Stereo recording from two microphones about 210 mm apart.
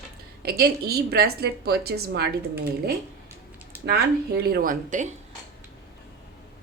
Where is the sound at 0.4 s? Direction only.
45° right (ahead or behind).